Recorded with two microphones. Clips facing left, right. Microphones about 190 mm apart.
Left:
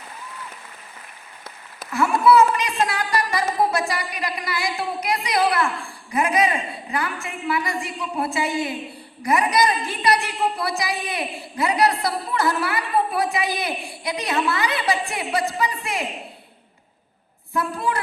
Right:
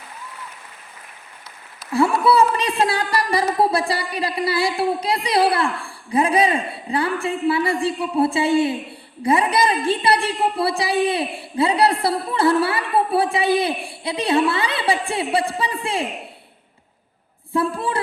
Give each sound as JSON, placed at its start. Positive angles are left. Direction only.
{"t": 1.9, "sound": "a woman's voice", "side_deg": -30}
{"t": 17.5, "sound": "a woman's voice", "side_deg": -30}